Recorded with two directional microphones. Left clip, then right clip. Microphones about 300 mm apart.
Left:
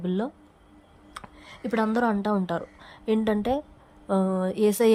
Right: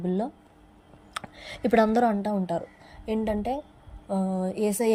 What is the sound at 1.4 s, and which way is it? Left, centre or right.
Speech, centre.